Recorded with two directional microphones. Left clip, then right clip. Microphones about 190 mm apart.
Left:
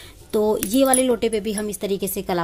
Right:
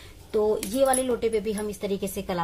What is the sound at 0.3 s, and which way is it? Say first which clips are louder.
Speech: left 4 dB; 50° left (ahead or behind).